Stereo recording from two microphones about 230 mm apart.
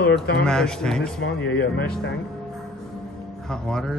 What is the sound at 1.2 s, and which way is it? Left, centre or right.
Speech, left.